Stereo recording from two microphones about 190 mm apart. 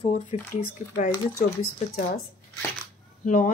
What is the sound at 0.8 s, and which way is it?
Speech, 50° left (ahead or behind).